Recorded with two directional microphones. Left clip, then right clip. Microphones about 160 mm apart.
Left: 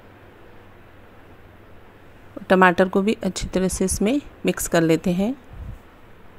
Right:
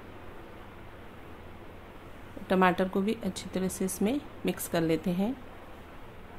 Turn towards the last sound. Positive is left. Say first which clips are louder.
# left 9 dB
turn(degrees=55)  # may be behind; listen again after turning